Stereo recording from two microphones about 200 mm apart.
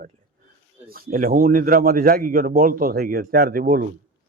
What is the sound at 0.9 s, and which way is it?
Speech, 45° right (ahead or behind).